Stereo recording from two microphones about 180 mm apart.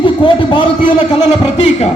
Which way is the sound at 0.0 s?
30° left (ahead or behind).